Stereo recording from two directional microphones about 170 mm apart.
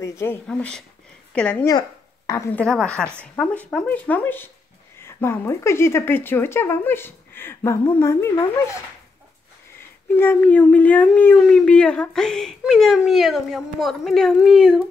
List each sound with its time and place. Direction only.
0.0 s speech: 15° left (ahead or behind)
0.5 s speech: 5° left (ahead or behind)
1.7 s speech: 20° left (ahead or behind)
2.6 s speech: 5° left (ahead or behind)
9.8 s speech: 10° left (ahead or behind)